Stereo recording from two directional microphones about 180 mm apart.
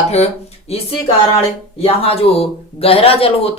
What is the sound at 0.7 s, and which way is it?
Speech, 35° left (ahead or behind).